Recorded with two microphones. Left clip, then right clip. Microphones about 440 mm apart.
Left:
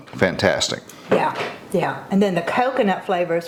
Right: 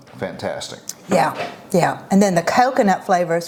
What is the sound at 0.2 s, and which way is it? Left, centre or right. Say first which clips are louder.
Speech: left 8 dB; left.